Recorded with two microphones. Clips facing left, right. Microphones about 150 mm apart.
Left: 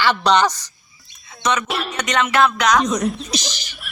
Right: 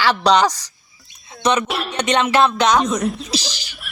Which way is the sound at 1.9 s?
30° right (ahead or behind).